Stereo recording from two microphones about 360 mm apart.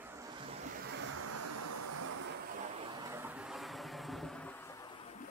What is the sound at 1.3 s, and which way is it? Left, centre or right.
Vehicle, right.